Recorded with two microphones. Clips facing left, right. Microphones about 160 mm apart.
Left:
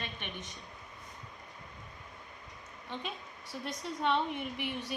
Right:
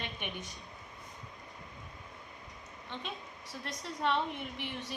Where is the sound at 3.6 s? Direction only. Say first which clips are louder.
Left 1 dB; centre (ahead or behind).